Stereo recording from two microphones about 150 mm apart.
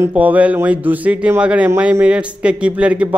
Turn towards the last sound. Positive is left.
turn(degrees=-10)  # may be behind; listen again after turning